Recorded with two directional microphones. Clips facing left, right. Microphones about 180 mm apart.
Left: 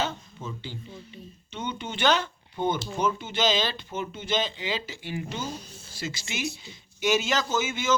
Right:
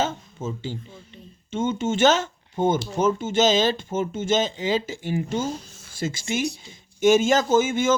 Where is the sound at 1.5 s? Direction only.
45° right (ahead or behind).